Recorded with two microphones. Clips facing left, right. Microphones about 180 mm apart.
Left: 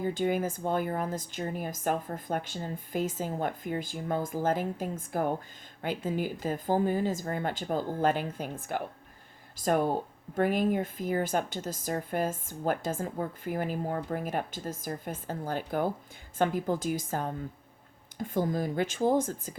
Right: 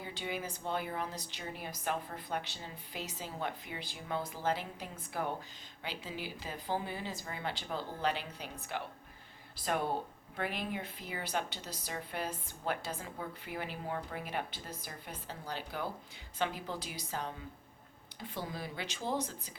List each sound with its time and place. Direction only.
0.0 s speech: 45° left (ahead or behind)